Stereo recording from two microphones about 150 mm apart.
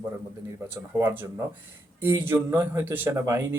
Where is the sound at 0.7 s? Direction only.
15° right (ahead or behind).